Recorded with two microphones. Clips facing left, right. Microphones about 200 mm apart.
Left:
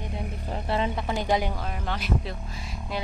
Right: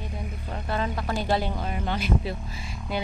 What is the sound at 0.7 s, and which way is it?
Speech, 20° left (ahead or behind).